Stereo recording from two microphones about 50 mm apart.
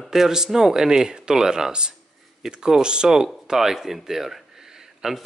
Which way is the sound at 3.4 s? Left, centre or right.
Centre.